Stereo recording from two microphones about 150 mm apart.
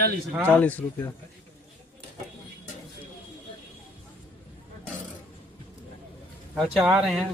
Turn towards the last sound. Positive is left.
turn(degrees=-5)  # may be behind; listen again after turning